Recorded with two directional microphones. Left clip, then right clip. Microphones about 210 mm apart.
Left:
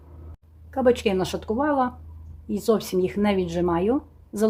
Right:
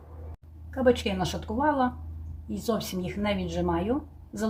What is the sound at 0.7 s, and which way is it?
Speech, 45° left (ahead or behind).